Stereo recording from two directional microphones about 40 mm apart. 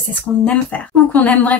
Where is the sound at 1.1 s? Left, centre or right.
Left.